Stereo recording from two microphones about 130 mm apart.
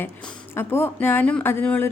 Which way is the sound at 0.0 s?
10° left (ahead or behind).